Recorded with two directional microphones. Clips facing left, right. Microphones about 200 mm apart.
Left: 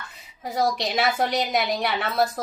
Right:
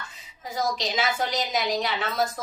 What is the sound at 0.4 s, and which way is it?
A woman's voice, 60° left (ahead or behind).